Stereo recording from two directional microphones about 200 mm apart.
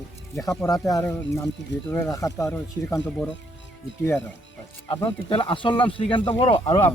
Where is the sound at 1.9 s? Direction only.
10° left (ahead or behind).